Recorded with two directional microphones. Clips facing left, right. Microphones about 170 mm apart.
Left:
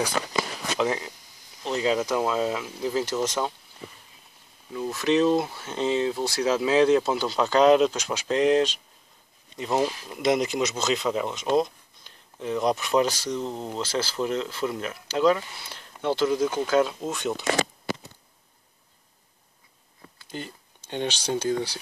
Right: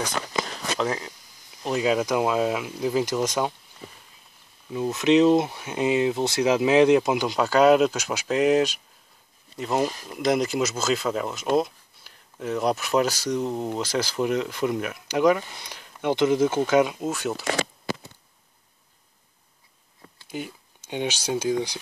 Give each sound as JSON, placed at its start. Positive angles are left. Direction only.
{"t": 0.7, "sound": "speech", "side_deg": 5}
{"t": 1.6, "sound": "speech", "side_deg": -10}
{"t": 4.7, "sound": "speech", "side_deg": -20}
{"t": 17.0, "sound": "speech", "side_deg": -5}
{"t": 20.2, "sound": "speech", "side_deg": -10}